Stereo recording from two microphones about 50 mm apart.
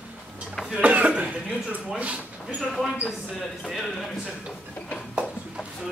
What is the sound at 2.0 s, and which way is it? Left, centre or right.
Speech, right.